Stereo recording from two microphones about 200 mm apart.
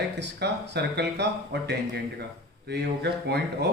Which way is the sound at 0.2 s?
60° right (ahead or behind).